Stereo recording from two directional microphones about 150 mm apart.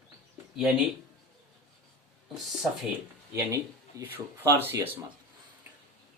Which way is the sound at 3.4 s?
20° right (ahead or behind).